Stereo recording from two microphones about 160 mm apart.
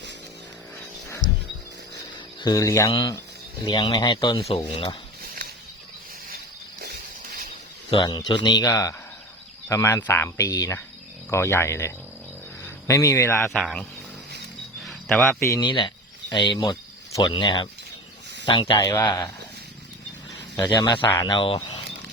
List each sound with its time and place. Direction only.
1.2 s a sound: 60° right (ahead or behind)
2.4 s speech: 25° left (ahead or behind)
5.2 s a sound: 70° right (ahead or behind)
7.9 s a man's voice: 30° left (ahead or behind)
13.4 s speech: centre (ahead or behind)
14.8 s cricket: centre (ahead or behind)
15.2 s speech: 15° left (ahead or behind)
15.6 s a man's voice: 30° left (ahead or behind)
20.6 s speech: 25° left (ahead or behind)